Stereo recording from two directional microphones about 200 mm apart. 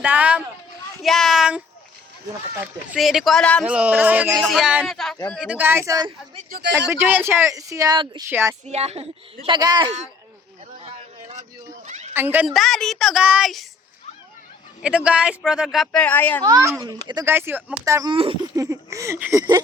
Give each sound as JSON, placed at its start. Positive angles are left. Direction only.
{"t": 0.0, "sound": "speech", "side_deg": -5}
{"t": 6.5, "sound": "speech", "side_deg": -55}
{"t": 6.9, "sound": "speech", "side_deg": -10}
{"t": 8.6, "sound": "a woman's voice", "side_deg": -30}
{"t": 10.8, "sound": "vehicle", "side_deg": -30}
{"t": 11.9, "sound": "a sound", "side_deg": -35}
{"t": 12.1, "sound": "speech", "side_deg": -10}
{"t": 14.8, "sound": "speech", "side_deg": -5}
{"t": 16.4, "sound": "speech", "side_deg": -20}